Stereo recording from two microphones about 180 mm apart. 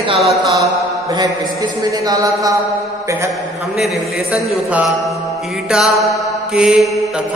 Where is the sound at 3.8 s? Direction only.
5° right (ahead or behind).